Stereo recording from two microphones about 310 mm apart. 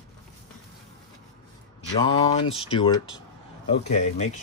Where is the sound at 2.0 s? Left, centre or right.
Centre.